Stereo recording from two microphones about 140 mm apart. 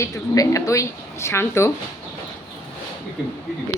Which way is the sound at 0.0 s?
25° left (ahead or behind).